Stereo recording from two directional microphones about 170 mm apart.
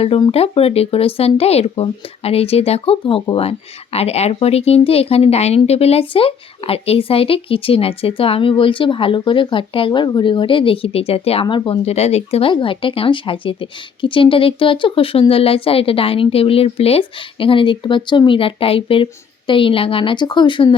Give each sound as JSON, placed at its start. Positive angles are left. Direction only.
{"t": 0.0, "sound": "a woman's voice", "side_deg": 35}